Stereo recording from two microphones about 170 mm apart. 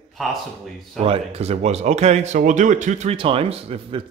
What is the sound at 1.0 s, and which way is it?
Speech, 35° right (ahead or behind).